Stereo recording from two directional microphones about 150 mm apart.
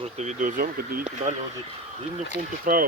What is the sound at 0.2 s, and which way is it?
Speech, 55° right (ahead or behind).